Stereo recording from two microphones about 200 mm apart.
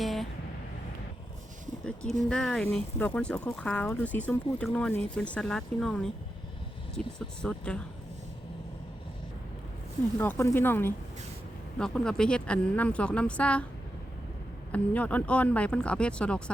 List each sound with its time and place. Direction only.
0.0 s vehicle: centre (ahead or behind)
2.3 s speech: 5° left (ahead or behind)
10.2 s speech: 10° left (ahead or behind)
14.7 s speech: 5° left (ahead or behind)